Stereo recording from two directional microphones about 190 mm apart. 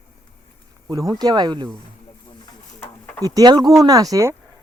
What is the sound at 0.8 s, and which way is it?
Speech, 20° right (ahead or behind).